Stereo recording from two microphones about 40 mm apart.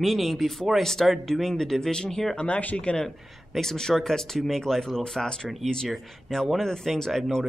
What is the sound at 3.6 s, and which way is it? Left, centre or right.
Speech, centre.